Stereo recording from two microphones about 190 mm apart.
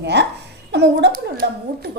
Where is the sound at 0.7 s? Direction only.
60° right (ahead or behind).